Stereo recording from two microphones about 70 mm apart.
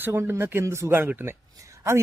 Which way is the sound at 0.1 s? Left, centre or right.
Right.